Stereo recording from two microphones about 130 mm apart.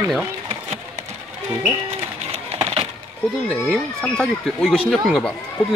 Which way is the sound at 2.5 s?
45° right (ahead or behind).